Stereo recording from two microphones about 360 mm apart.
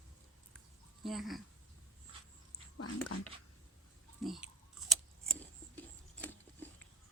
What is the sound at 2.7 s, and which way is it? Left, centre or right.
Speech, left.